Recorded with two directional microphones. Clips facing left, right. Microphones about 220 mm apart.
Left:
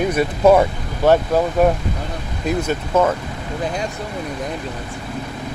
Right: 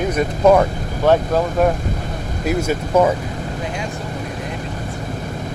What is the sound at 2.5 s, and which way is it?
Speech, 10° right (ahead or behind).